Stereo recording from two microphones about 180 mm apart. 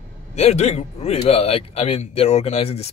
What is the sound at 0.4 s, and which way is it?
A man's voice, 35° left (ahead or behind).